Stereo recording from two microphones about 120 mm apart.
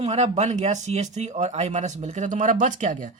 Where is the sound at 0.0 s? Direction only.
60° right (ahead or behind).